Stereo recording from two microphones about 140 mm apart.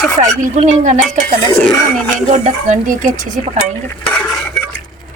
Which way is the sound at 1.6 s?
10° left (ahead or behind).